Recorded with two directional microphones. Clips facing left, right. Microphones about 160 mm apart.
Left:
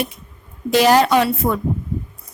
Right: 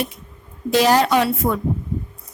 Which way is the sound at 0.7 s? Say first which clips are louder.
Left 2 dB; 70° left (ahead or behind).